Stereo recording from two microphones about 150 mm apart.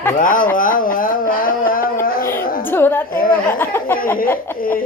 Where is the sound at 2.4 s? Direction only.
75° left (ahead or behind).